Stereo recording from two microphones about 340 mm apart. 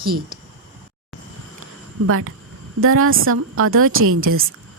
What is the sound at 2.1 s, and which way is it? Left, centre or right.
A woman's voice, right.